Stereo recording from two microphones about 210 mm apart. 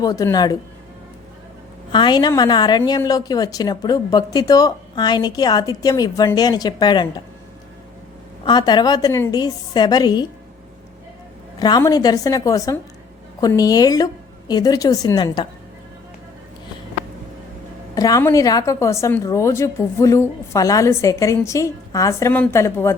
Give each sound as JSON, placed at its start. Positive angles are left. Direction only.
{"t": 0.0, "sound": "a woman's voice", "side_deg": 15}
{"t": 1.9, "sound": "a woman's voice", "side_deg": 20}
{"t": 8.4, "sound": "a woman's voice", "side_deg": 20}
{"t": 11.6, "sound": "a woman's voice", "side_deg": 20}
{"t": 17.9, "sound": "a woman's voice", "side_deg": 15}